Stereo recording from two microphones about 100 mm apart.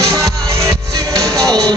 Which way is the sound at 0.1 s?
35° right (ahead or behind).